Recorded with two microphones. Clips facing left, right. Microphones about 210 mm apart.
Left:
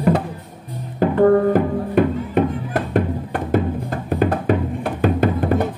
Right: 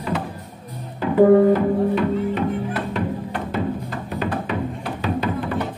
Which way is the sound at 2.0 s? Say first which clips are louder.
Left 4 dB; 50° left (ahead or behind).